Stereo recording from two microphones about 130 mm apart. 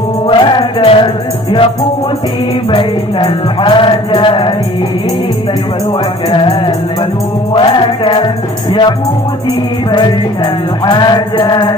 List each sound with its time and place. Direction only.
0.3 s music: 35° left (ahead or behind)
3.3 s music: 40° left (ahead or behind)
6.3 s music: 40° left (ahead or behind)
9.8 s music: 35° left (ahead or behind)